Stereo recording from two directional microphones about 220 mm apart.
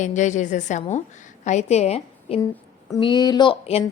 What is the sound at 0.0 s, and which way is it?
A woman's voice, 35° left (ahead or behind).